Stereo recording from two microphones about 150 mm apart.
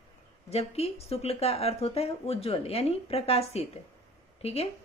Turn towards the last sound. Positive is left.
turn(degrees=45)  # may be behind; listen again after turning